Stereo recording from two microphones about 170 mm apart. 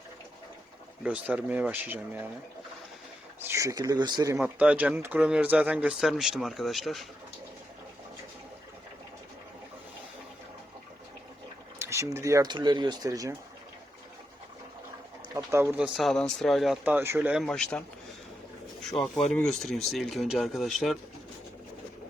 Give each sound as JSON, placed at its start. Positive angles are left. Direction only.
{"t": 1.0, "sound": "speech", "side_deg": -10}
{"t": 3.4, "sound": "speech", "side_deg": -15}
{"t": 4.4, "sound": "speech", "side_deg": -5}
{"t": 11.8, "sound": "speech", "side_deg": -15}
{"t": 15.4, "sound": "speech", "side_deg": -15}
{"t": 15.8, "sound": "speech", "side_deg": 0}
{"t": 16.8, "sound": "speech", "side_deg": -10}